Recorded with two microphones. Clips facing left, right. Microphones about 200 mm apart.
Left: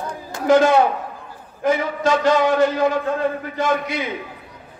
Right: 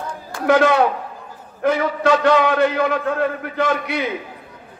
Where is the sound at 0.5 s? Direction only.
60° right (ahead or behind).